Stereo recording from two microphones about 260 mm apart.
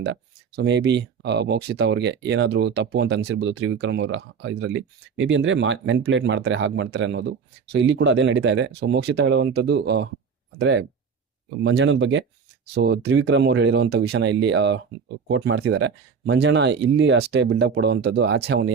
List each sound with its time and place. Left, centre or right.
0.0 s speech: right